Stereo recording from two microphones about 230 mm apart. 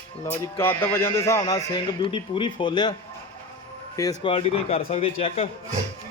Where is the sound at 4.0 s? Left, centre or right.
Centre.